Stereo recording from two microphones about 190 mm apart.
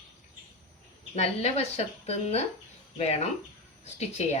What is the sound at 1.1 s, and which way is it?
Speech, 35° left (ahead or behind).